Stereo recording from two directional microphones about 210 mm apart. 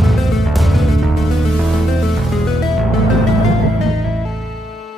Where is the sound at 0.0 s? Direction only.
Centre (ahead or behind).